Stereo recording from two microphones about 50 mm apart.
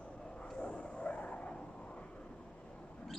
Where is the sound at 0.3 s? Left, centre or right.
Centre.